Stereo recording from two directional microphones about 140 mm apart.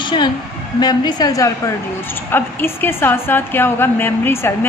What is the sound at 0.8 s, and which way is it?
A woman's voice, 30° left (ahead or behind).